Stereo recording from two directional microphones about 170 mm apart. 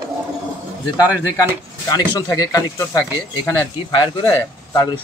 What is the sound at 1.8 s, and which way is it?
Speech, 20° left (ahead or behind).